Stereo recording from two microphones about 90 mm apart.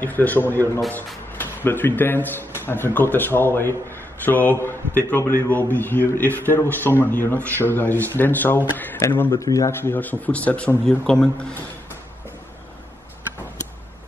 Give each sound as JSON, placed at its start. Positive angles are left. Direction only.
{"t": 0.0, "sound": "speech", "side_deg": 20}
{"t": 9.4, "sound": "speech", "side_deg": 35}
{"t": 9.8, "sound": "speech", "side_deg": 20}